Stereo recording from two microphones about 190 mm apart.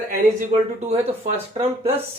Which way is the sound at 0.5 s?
40° right (ahead or behind).